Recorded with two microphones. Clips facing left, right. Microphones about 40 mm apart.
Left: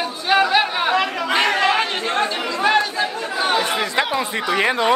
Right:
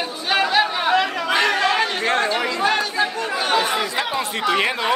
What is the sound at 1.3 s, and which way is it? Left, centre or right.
Chatter, left.